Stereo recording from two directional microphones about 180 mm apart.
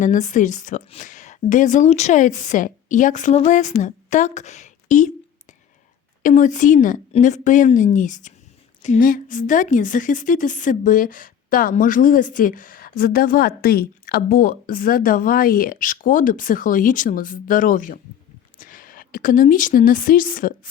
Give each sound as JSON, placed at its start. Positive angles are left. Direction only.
{"t": 0.0, "sound": "a woman's voice", "side_deg": 45}
{"t": 6.2, "sound": "a woman's voice", "side_deg": 45}